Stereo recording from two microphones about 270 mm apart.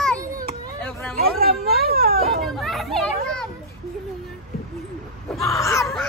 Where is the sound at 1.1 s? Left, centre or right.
Right.